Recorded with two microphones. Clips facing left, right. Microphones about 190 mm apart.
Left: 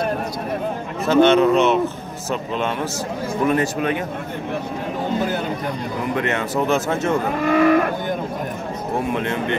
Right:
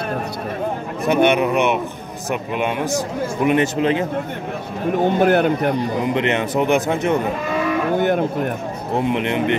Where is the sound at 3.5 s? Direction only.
25° right (ahead or behind).